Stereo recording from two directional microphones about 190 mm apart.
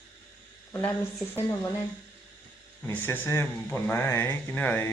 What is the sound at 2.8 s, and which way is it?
Speech, 10° left (ahead or behind).